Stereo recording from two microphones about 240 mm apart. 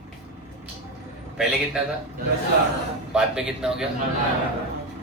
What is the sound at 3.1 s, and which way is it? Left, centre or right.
Speech, centre.